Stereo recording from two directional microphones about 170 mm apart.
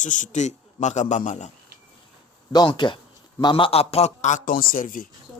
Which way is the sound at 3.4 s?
30° left (ahead or behind).